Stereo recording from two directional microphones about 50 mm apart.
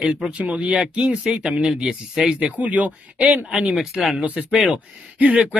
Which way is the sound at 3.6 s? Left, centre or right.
Centre.